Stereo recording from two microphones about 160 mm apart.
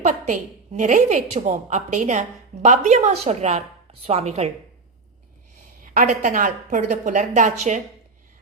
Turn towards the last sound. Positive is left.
turn(degrees=-50)  # may be behind; listen again after turning